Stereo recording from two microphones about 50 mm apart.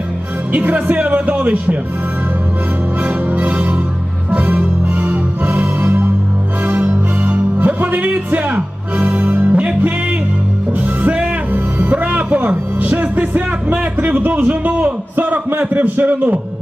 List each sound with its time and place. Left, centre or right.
0.5 s a man's voice: right
3.0 s music: right
14.0 s a man's voice: right